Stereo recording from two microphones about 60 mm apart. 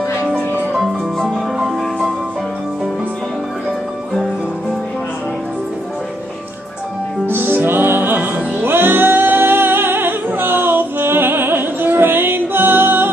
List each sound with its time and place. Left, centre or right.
7.2 s music: right